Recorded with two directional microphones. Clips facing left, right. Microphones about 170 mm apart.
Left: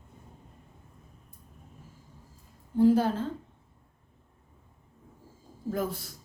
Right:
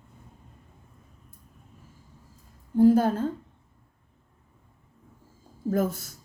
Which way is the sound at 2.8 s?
45° right (ahead or behind).